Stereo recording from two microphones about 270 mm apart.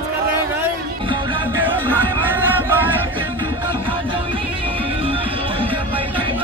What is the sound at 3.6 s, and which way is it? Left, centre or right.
Music, centre.